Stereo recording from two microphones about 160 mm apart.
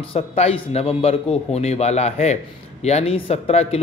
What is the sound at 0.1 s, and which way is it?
Speech, 40° left (ahead or behind).